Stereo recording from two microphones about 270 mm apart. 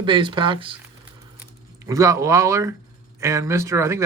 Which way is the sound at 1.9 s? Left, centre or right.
Centre.